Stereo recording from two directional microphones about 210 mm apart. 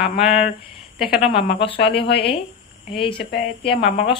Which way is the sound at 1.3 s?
25° left (ahead or behind).